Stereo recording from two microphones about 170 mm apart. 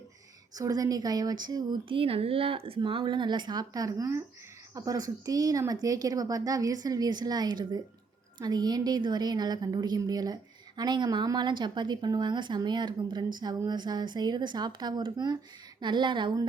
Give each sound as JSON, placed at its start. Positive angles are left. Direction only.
{"t": 0.5, "sound": "a woman's voice", "side_deg": -20}